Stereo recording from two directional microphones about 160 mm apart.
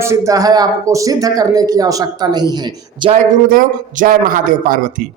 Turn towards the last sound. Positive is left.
turn(degrees=-60)  # may be behind; listen again after turning